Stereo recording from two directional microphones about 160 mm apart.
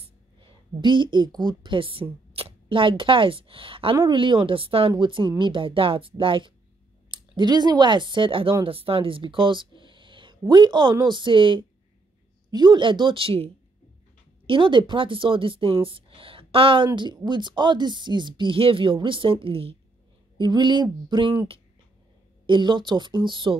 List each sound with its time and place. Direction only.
0.0 s a woman's voice: 30° right (ahead or behind)
22.5 s speech: 30° right (ahead or behind)